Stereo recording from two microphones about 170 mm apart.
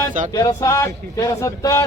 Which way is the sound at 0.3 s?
20° left (ahead or behind).